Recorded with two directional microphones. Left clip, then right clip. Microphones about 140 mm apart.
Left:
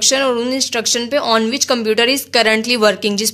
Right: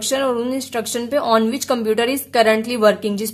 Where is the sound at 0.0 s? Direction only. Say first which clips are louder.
Left 4 dB; centre (ahead or behind).